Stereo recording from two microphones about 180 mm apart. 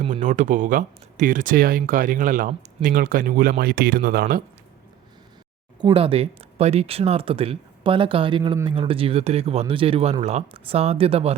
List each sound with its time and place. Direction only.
0.0 s speech: 45° right (ahead or behind)
5.8 s speech: 30° right (ahead or behind)